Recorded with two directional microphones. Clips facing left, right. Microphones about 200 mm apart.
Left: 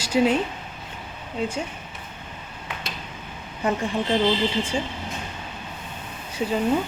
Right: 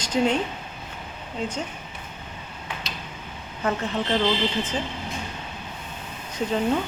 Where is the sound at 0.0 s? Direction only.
10° left (ahead or behind).